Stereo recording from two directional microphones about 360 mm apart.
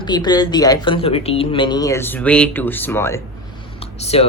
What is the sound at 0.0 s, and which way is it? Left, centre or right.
Speech, centre.